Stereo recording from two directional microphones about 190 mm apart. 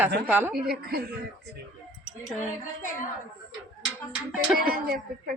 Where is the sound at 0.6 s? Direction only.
55° right (ahead or behind).